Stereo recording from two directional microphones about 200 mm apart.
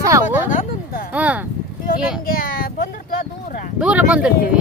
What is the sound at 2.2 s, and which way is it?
Speech, 45° left (ahead or behind).